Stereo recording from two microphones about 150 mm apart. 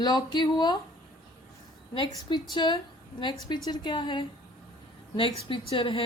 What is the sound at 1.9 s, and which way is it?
Speech, 35° left (ahead or behind).